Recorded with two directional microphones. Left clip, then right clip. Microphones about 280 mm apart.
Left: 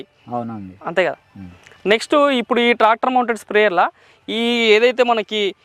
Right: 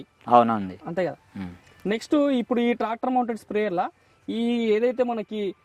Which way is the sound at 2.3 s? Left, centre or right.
Centre.